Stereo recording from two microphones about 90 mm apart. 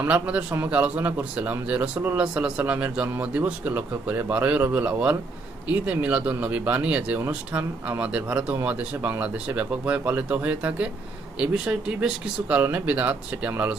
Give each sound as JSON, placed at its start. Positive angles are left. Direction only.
{"t": 0.0, "sound": "speech", "side_deg": -15}